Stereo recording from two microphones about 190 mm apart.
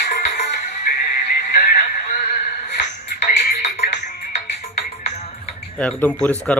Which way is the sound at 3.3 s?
35° left (ahead or behind).